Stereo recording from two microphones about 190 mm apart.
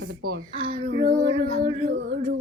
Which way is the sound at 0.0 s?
60° right (ahead or behind).